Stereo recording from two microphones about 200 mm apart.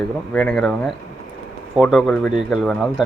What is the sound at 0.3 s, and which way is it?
Speech, 5° left (ahead or behind).